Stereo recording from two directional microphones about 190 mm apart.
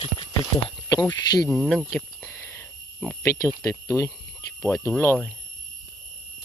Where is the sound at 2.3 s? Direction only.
10° left (ahead or behind).